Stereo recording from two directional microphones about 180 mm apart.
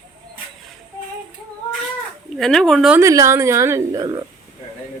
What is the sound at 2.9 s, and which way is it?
A woman's voice, 15° right (ahead or behind).